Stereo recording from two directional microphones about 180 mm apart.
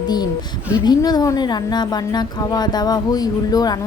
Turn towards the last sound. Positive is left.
turn(degrees=20)  # may be behind; listen again after turning